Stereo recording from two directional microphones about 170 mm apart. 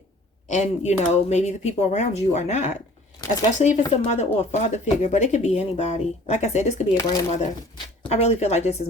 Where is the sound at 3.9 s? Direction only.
40° left (ahead or behind).